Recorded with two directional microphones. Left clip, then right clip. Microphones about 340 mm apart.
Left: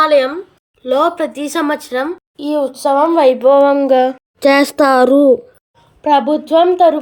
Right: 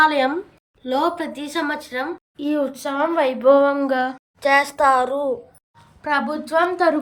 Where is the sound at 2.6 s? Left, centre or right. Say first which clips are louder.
Left 12 dB; left.